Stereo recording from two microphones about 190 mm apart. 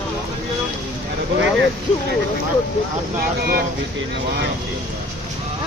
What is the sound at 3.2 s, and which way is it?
Speech, 50° right (ahead or behind).